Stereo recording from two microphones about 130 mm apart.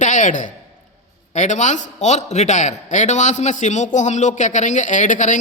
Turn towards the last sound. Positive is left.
turn(degrees=75)  # may be behind; listen again after turning